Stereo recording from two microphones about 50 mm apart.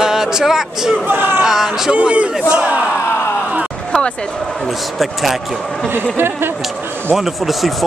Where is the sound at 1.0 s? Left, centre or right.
Right.